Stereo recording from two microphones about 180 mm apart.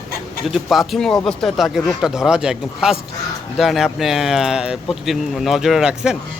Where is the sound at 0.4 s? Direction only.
Centre (ahead or behind).